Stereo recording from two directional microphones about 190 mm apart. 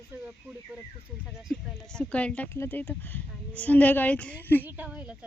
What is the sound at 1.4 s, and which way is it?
Speech, centre (ahead or behind).